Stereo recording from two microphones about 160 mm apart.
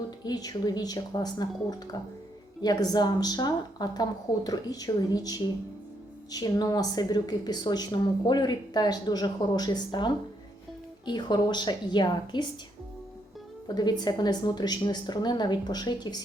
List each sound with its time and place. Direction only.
0.3 s a woman's voice: 25° left (ahead or behind)
2.6 s a woman's voice: 25° left (ahead or behind)
13.7 s a woman's voice: 25° left (ahead or behind)